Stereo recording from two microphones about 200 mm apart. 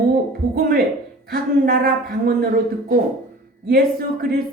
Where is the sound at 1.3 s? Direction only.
50° right (ahead or behind).